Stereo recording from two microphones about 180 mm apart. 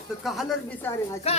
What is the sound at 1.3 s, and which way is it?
Speech, 35° left (ahead or behind).